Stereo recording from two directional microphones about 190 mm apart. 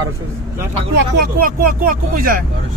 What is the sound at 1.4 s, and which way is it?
Speech, 50° right (ahead or behind).